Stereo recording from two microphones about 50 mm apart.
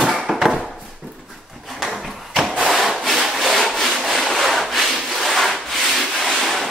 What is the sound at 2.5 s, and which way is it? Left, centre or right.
Sawing, centre.